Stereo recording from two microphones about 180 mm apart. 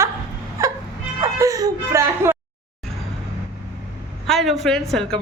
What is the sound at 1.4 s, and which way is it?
Dog, 20° right (ahead or behind).